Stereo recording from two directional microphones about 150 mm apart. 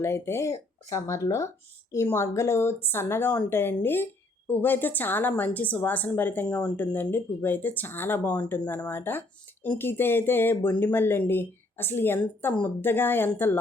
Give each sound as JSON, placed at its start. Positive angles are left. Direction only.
{"t": 0.0, "sound": "speech", "side_deg": 15}